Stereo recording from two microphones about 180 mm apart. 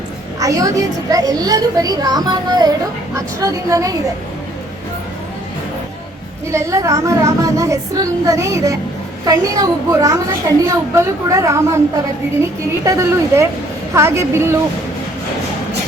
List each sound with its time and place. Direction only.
0.3 s a woman's voice: 20° right (ahead or behind)
6.5 s a woman's voice: 15° right (ahead or behind)
12.8 s a woman's voice: 15° right (ahead or behind)